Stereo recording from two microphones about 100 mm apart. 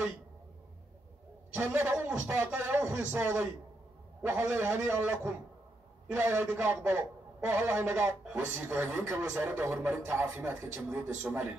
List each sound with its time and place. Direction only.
1.5 s a man's voice: 20° right (ahead or behind)